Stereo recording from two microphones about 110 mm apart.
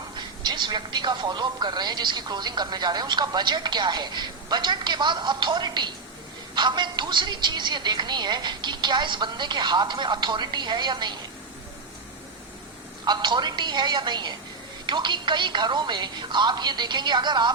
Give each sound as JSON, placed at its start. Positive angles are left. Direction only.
{"t": 0.2, "sound": "speech", "side_deg": -40}
{"t": 13.1, "sound": "speech", "side_deg": -45}